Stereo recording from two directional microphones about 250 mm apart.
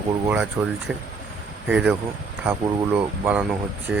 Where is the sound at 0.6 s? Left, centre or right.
Centre.